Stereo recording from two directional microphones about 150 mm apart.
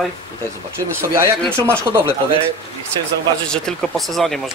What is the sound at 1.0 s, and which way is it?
Speech, 20° right (ahead or behind).